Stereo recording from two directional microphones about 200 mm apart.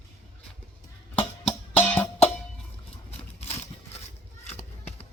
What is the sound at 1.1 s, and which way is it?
Music, 10° left (ahead or behind).